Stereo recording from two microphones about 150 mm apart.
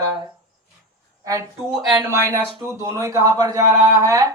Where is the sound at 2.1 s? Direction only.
15° right (ahead or behind).